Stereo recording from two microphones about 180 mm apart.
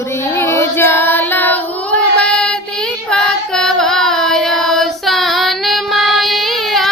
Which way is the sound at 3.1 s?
5° left (ahead or behind).